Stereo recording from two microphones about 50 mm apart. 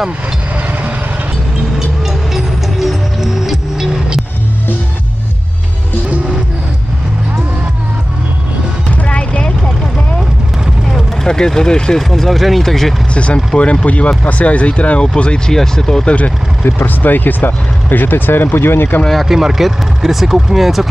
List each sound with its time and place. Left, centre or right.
2.3 s music: centre
8.8 s music: left
11.2 s speech: centre
13.1 s speech: left
16.6 s speech: left
19.2 s speech: centre